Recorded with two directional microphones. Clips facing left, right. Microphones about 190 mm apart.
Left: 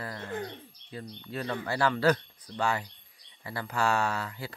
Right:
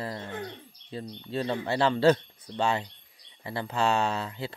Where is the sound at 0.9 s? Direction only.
25° right (ahead or behind).